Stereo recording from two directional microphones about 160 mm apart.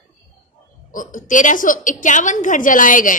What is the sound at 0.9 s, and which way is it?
A woman's voice, 55° left (ahead or behind).